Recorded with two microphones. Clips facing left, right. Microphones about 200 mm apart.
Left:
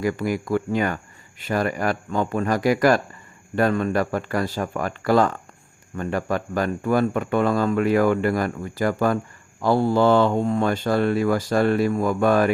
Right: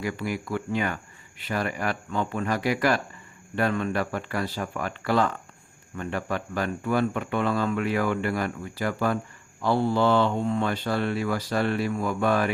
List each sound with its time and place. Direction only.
0.0 s speech: 45° left (ahead or behind)